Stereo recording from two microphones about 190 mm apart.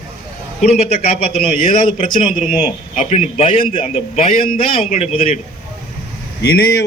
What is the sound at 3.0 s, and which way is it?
A man's voice, 35° left (ahead or behind).